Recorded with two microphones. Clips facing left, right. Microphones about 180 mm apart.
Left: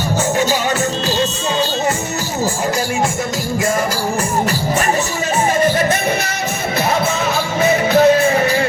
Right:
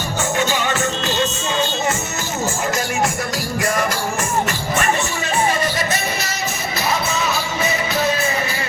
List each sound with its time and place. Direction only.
5.6 s music: 55° left (ahead or behind)
7.3 s music: 60° left (ahead or behind)